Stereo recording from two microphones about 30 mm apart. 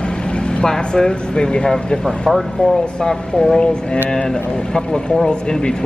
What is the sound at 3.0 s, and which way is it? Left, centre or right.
Speech, left.